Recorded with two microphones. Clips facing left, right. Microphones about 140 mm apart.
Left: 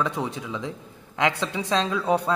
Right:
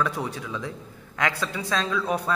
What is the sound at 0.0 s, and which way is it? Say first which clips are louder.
A man's voice: left 1 dB; 20° left (ahead or behind).